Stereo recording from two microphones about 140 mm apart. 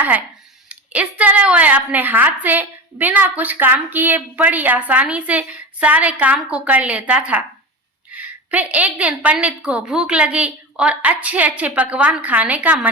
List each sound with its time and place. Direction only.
0.7 s a woman's voice: 10° right (ahead or behind)